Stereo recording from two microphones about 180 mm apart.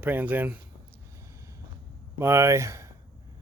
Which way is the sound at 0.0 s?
10° right (ahead or behind).